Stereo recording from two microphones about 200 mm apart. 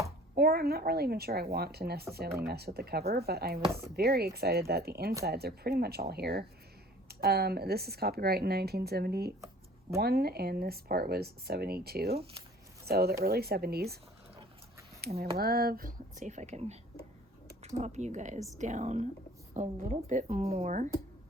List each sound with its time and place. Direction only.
0.3 s speech: 50° right (ahead or behind)
3.7 s speech: 15° right (ahead or behind)
3.9 s speech: 50° right (ahead or behind)
12.1 s speech: 30° right (ahead or behind)
12.8 s speech: 50° right (ahead or behind)
15.2 s speech: 50° right (ahead or behind); by 16.7 s 35° right (ahead or behind)
17.7 s speech: 35° right (ahead or behind)